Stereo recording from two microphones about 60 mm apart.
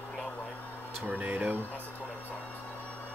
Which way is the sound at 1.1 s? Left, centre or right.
Right.